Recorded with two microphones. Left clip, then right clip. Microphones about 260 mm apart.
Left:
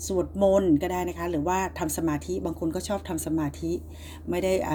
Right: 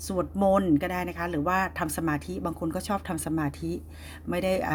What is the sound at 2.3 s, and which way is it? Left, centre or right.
Speech, right.